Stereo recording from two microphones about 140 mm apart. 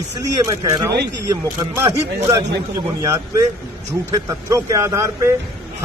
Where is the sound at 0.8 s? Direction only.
20° right (ahead or behind).